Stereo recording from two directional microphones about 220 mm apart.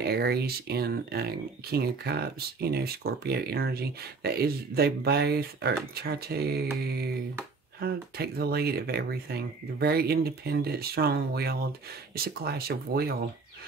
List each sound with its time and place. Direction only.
0.0 s speech: 45° right (ahead or behind)